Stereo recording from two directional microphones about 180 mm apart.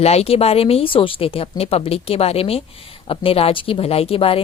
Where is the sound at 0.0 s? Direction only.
35° left (ahead or behind).